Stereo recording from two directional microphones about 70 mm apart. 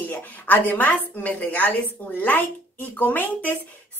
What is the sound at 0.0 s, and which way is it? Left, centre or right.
A woman's voice, left.